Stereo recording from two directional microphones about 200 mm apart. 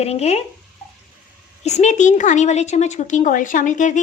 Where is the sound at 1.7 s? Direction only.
35° left (ahead or behind).